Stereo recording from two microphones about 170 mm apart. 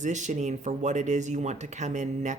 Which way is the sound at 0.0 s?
45° right (ahead or behind).